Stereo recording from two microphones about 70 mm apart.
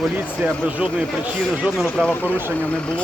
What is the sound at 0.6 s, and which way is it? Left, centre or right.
Speech, centre.